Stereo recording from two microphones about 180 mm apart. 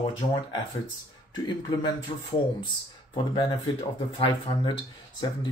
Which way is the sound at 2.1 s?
30° left (ahead or behind).